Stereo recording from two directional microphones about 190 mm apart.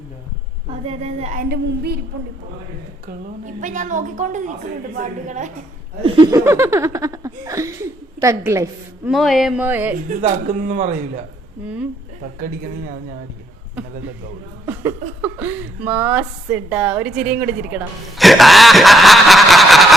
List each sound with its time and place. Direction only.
0.7 s a woman's voice: 35° right (ahead or behind)
1.5 s speech: 55° right (ahead or behind)
3.1 s a woman's voice: 40° right (ahead or behind)
6.0 s speech: 25° right (ahead or behind)
9.0 s speech: centre (ahead or behind)
10.1 s a woman's voice: 40° right (ahead or behind)
11.6 s speech: 5° right (ahead or behind)
14.7 s speech: 10° right (ahead or behind)